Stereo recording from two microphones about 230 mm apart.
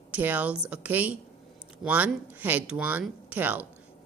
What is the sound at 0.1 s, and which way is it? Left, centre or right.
A woman's voice, centre.